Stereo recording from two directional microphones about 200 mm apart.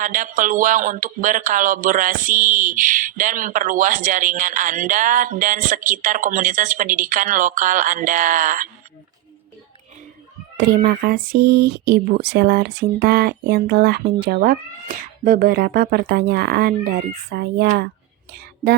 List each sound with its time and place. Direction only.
0.0 s speech: 40° right (ahead or behind)
10.6 s speech: 50° right (ahead or behind)